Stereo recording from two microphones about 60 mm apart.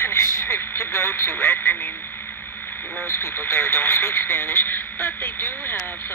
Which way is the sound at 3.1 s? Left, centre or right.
Left.